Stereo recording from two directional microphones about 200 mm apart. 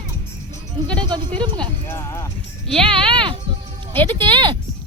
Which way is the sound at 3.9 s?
25° right (ahead or behind).